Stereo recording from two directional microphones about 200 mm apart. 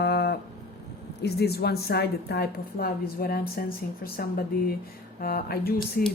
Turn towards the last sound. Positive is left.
turn(degrees=50)  # may be behind; listen again after turning